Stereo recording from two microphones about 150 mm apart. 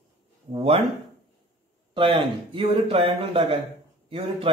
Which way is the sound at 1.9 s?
35° right (ahead or behind).